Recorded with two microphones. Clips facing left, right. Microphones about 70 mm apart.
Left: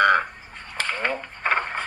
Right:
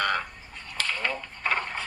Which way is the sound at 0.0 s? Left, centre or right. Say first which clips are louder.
Left 9 dB; left.